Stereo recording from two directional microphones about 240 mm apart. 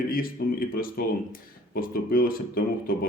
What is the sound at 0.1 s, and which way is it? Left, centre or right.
Speech, left.